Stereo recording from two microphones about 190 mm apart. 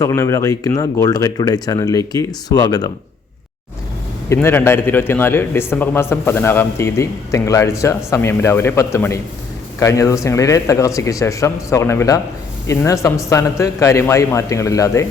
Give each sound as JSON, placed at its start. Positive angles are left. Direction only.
{"t": 0.0, "sound": "a man's voice", "side_deg": 15}
{"t": 4.3, "sound": "a man's voice", "side_deg": 10}